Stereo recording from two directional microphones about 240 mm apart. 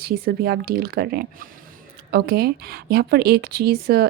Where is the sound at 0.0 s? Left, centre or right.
Right.